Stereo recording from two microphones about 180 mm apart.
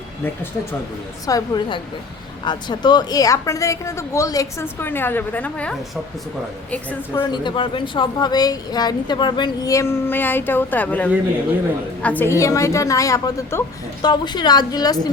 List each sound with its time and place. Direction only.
1.3 s a woman's voice: 20° left (ahead or behind)
7.3 s a woman's voice: 25° left (ahead or behind)